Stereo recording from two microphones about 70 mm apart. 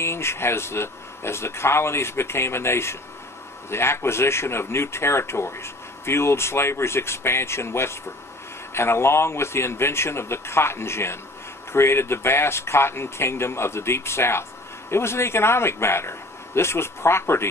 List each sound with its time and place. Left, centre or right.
0.0 s speech: left